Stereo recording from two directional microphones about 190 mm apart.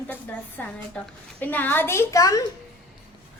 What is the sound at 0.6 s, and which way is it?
A woman's voice, 10° left (ahead or behind).